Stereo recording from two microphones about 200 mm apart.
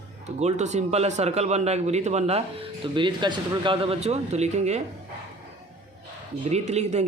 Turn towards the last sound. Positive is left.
turn(degrees=-35)  # may be behind; listen again after turning